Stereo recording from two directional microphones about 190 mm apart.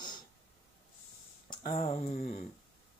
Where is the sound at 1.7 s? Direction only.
30° left (ahead or behind).